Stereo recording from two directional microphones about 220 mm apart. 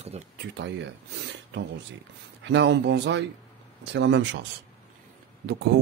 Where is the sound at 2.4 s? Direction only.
55° right (ahead or behind).